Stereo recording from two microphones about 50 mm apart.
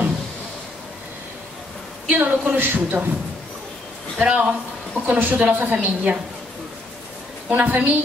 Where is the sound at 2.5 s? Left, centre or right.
Right.